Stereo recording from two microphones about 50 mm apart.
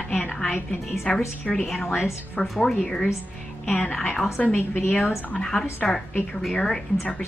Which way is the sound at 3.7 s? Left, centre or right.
Left.